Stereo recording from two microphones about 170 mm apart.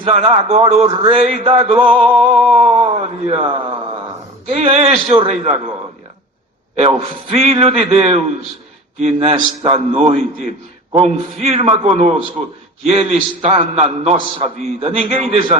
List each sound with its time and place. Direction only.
0.0 s a man's voice: 35° right (ahead or behind)
6.7 s a man's voice: 35° right (ahead or behind)